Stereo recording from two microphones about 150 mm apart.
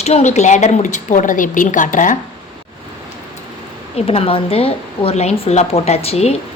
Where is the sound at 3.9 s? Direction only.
40° left (ahead or behind).